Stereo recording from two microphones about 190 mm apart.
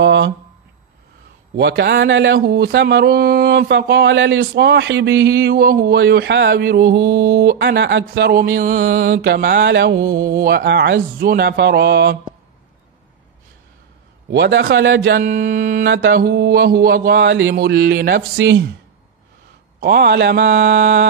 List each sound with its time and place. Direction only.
0.0 s a sound: 65° right (ahead or behind)
1.6 s speech: 65° right (ahead or behind)
8.1 s mantra: 60° right (ahead or behind)
8.9 s speech: 55° right (ahead or behind)
14.3 s speech: 65° right (ahead or behind)
15.2 s mantra: 45° right (ahead or behind)
15.8 s speech: 65° right (ahead or behind)
19.8 s speech: 55° right (ahead or behind)